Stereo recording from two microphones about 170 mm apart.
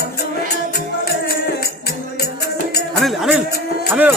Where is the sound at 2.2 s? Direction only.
70° left (ahead or behind).